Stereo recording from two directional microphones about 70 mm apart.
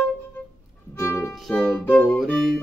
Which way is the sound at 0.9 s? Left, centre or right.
Left.